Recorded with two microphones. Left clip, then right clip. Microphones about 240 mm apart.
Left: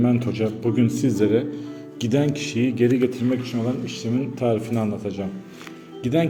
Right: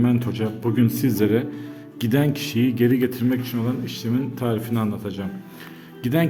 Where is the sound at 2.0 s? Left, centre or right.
Right.